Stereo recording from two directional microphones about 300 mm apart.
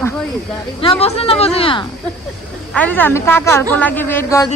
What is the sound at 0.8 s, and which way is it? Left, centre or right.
A woman's voice, centre.